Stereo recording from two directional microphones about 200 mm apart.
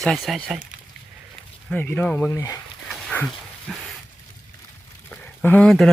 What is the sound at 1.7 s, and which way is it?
Speech, 5° left (ahead or behind).